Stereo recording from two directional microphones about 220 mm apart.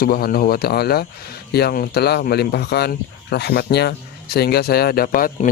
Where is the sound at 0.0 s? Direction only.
45° left (ahead or behind).